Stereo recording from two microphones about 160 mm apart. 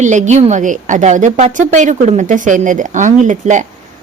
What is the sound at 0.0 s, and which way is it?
A woman's voice, 50° right (ahead or behind).